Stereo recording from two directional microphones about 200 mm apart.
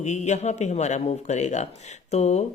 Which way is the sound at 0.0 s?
35° left (ahead or behind).